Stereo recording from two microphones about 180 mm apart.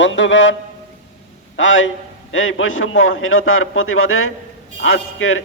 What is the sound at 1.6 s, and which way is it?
A man's voice, 90° left.